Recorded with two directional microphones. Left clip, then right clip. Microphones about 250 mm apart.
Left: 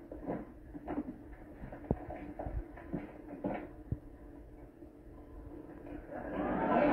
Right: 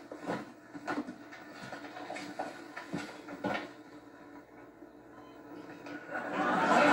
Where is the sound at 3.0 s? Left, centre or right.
Right.